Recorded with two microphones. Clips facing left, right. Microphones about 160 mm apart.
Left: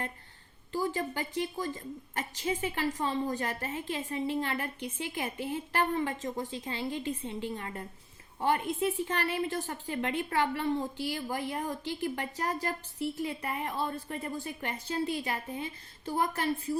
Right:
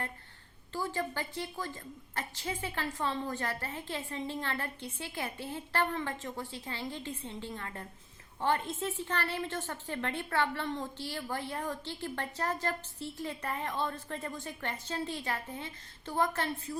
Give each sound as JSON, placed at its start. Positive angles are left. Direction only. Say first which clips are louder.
{"t": 0.7, "sound": "a woman's voice", "louder": "left 3 dB", "side_deg": 15}